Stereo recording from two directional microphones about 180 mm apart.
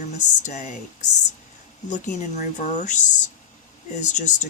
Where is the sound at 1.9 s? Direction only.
45° left (ahead or behind).